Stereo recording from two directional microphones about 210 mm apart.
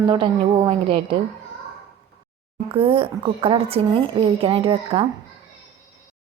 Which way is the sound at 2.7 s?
25° right (ahead or behind).